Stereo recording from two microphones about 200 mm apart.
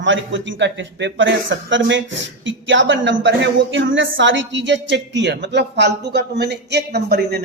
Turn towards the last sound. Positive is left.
turn(degrees=-55)  # may be behind; listen again after turning